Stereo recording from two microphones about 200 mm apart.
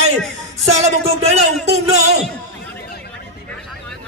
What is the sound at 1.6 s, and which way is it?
Music, 35° right (ahead or behind).